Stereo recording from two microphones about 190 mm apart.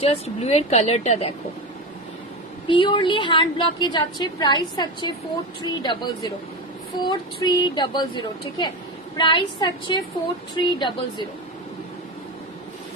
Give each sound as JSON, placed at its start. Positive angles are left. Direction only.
{"t": 0.0, "sound": "a woman's voice", "side_deg": 35}
{"t": 2.7, "sound": "a woman's voice", "side_deg": 25}